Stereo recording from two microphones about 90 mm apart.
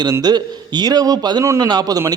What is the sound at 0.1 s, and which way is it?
A man's voice, 50° right (ahead or behind).